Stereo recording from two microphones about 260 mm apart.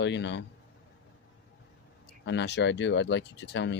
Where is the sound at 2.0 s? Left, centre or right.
Left.